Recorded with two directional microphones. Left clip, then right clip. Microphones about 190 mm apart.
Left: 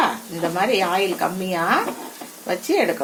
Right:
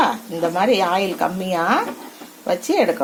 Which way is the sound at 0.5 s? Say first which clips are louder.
Right 2 dB; 40° right (ahead or behind).